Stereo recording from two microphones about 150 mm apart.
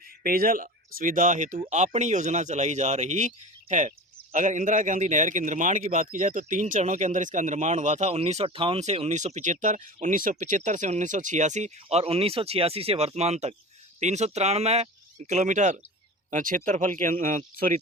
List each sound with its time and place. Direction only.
0.2 s speech: 75° right (ahead or behind)